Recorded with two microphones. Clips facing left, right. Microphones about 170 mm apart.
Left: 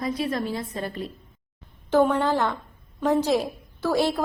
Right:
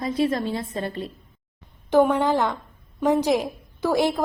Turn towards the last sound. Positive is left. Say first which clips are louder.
# right 2 dB
turn(degrees=-15)  # may be behind; listen again after turning